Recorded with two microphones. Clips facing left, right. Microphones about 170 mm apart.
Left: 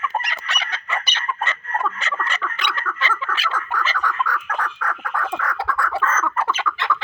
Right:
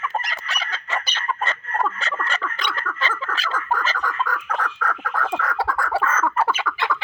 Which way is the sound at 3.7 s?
45° right (ahead or behind).